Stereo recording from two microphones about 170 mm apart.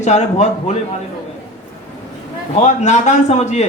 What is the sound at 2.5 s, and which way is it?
Speech, 40° left (ahead or behind).